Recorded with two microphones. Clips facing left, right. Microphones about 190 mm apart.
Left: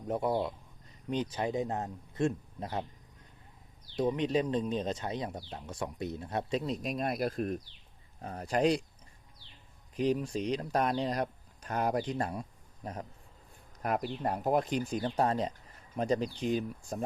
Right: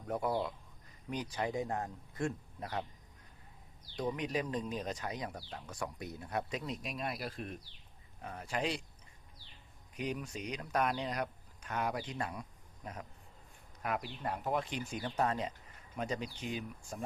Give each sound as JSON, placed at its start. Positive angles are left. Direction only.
{"t": 0.1, "sound": "speech", "side_deg": 20}
{"t": 3.9, "sound": "speech", "side_deg": 25}
{"t": 10.0, "sound": "speech", "side_deg": 30}